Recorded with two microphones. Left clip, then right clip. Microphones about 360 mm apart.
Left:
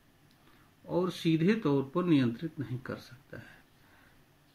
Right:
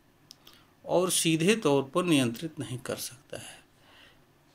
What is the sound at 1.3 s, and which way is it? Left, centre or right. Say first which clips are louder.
Speech: right 4 dB; centre.